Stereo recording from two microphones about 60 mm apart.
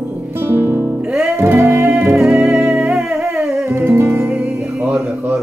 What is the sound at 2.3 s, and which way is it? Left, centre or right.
Music, centre.